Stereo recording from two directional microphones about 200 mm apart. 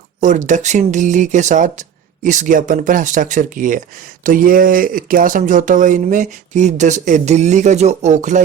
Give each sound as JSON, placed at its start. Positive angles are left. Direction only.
{"t": 0.2, "sound": "speech", "side_deg": -35}